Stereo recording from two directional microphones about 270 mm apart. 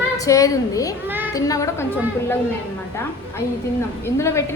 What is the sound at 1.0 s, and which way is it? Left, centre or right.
Children playing, centre.